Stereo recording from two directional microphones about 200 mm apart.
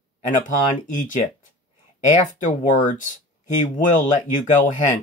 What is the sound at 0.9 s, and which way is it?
Speech, 40° left (ahead or behind).